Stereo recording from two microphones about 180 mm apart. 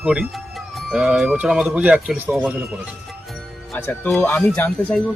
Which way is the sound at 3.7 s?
10° left (ahead or behind).